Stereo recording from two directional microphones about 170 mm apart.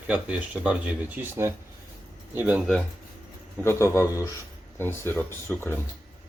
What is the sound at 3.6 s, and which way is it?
Speech, 15° left (ahead or behind).